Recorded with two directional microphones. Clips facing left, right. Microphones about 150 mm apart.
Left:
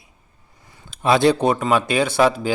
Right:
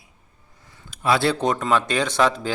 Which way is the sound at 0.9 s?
20° left (ahead or behind).